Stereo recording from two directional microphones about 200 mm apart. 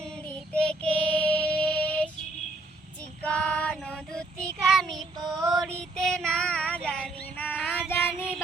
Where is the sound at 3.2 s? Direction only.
5° left (ahead or behind).